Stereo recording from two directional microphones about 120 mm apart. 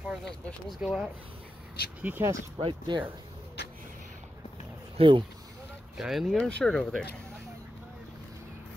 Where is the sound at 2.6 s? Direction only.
45° right (ahead or behind).